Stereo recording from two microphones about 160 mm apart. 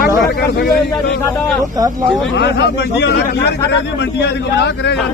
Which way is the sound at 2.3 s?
90° left.